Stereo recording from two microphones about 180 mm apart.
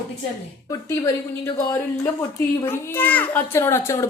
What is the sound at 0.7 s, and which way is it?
Speech, 15° left (ahead or behind).